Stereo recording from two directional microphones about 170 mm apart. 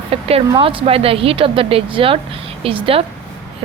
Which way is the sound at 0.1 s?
35° right (ahead or behind).